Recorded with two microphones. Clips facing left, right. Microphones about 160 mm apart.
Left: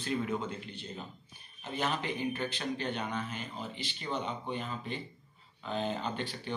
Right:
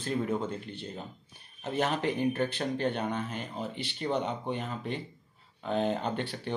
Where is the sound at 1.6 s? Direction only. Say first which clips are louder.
Right 5 dB; 65° right (ahead or behind).